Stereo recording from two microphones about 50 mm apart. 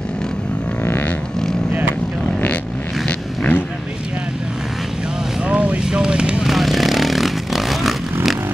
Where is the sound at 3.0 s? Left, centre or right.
Left.